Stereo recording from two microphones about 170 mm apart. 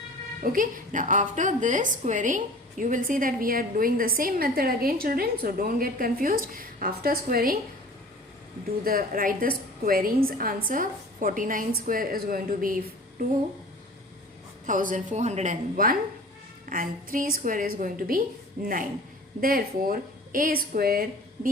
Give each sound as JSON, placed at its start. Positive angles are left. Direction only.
{"t": 0.4, "sound": "a woman's voice", "side_deg": -55}
{"t": 8.8, "sound": "a woman's voice", "side_deg": -60}
{"t": 14.7, "sound": "a woman's voice", "side_deg": -50}